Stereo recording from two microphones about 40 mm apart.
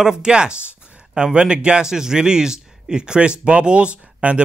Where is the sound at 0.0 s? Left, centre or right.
Centre.